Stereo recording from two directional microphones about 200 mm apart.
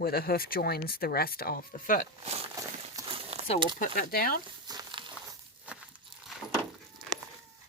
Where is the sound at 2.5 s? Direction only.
20° right (ahead or behind).